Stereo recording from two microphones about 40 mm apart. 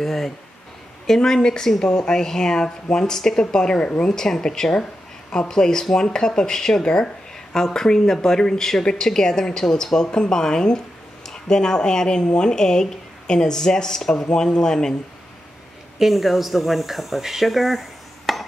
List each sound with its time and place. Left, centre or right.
0.0 s speech: centre
16.0 s speech: centre